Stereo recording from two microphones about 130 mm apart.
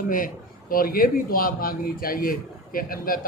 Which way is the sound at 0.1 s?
90° left.